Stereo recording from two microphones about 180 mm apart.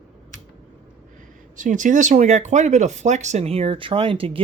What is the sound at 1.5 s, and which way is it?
Speech, 45° right (ahead or behind).